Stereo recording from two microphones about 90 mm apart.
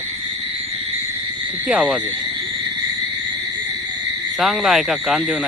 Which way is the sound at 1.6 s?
15° right (ahead or behind).